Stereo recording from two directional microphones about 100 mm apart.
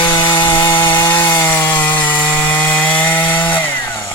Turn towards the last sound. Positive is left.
turn(degrees=20)  # may be behind; listen again after turning